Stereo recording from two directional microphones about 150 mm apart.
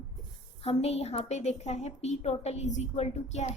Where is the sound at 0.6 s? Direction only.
45° left (ahead or behind).